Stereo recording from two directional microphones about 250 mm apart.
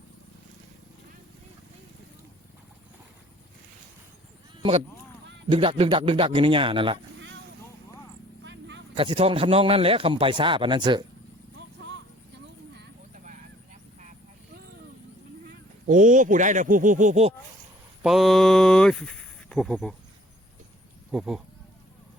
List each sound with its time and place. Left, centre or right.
5.5 s a man's voice: right
8.4 s a sound: right
9.0 s a man's voice: right
12.7 s horse: right
15.9 s speech: right
18.0 s speech: centre
21.1 s speech: centre